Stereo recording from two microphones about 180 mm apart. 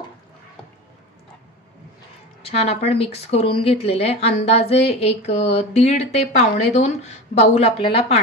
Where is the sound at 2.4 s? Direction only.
35° left (ahead or behind).